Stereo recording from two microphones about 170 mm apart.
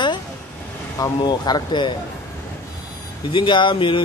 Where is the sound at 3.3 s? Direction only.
25° left (ahead or behind).